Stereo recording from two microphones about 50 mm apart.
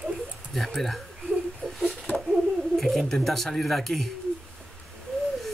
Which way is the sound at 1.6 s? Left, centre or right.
Centre.